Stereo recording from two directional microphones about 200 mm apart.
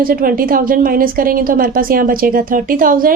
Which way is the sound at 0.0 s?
45° right (ahead or behind).